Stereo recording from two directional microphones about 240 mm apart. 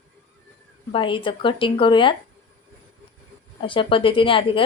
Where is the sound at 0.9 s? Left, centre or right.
Left.